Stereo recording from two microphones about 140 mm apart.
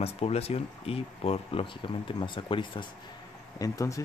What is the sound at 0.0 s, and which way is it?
Speech, 45° left (ahead or behind).